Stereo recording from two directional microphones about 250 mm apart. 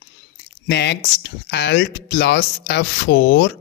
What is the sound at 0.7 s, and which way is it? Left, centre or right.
Speech, left.